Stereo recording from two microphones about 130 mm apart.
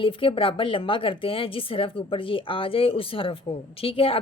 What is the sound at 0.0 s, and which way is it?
Speech, 45° left (ahead or behind).